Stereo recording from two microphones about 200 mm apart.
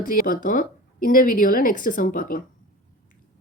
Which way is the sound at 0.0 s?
45° left (ahead or behind).